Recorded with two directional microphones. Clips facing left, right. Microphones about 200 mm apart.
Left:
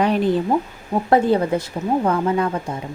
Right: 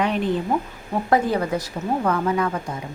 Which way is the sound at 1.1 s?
30° left (ahead or behind).